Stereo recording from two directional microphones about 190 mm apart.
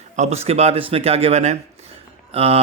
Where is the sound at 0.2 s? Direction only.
35° right (ahead or behind).